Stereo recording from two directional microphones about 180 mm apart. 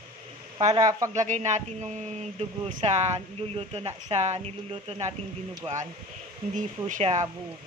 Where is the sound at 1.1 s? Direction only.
40° right (ahead or behind).